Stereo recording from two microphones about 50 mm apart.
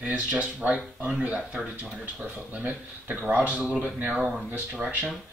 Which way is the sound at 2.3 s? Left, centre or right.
Right.